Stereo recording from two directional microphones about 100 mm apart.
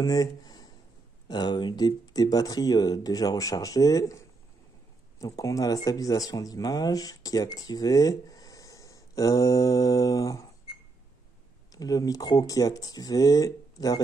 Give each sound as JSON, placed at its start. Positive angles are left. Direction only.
{"t": 0.0, "sound": "speech", "side_deg": 35}
{"t": 5.2, "sound": "speech", "side_deg": 35}
{"t": 11.7, "sound": "speech", "side_deg": 35}